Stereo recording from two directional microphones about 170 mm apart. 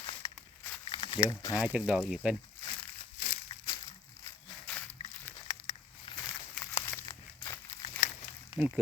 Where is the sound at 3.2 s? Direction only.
40° left (ahead or behind).